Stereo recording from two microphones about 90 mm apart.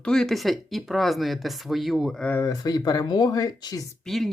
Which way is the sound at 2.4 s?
45° left (ahead or behind).